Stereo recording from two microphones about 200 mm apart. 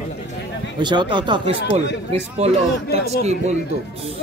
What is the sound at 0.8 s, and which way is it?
Speech, 20° right (ahead or behind).